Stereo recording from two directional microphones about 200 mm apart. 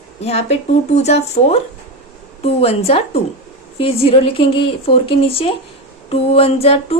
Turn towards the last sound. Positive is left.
turn(degrees=30)  # may be behind; listen again after turning